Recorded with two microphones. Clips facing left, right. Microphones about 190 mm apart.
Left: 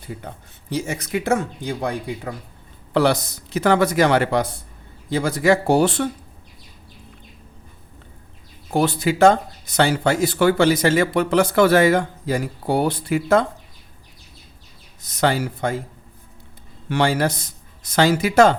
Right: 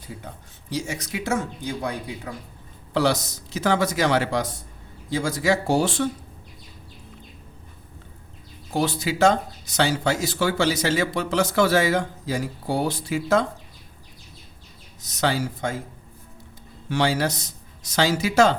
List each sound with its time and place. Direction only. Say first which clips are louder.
0.7 s speech: left 5 dB; 55° left (ahead or behind)
8.7 s speech: left 5 dB; 55° left (ahead or behind)
15.0 s speech: left 4 dB; 55° left (ahead or behind)
16.9 s speech: left 3 dB; 55° left (ahead or behind)